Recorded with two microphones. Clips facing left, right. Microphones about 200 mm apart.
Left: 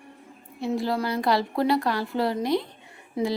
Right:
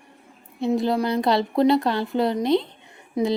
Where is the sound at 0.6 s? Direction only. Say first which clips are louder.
Right 4 dB; 20° right (ahead or behind).